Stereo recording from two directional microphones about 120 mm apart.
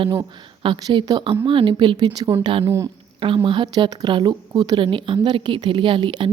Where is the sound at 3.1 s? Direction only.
45° right (ahead or behind).